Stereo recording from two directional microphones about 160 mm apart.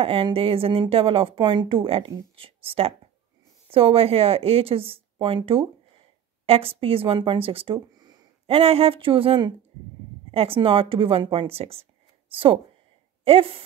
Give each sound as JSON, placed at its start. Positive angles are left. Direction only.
{"t": 0.0, "sound": "speech", "side_deg": -35}
{"t": 8.5, "sound": "speech", "side_deg": -35}